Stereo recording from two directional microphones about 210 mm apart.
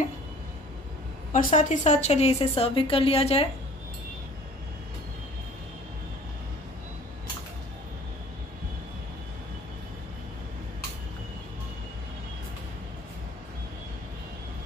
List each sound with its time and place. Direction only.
1.3 s a woman's voice: 35° left (ahead or behind)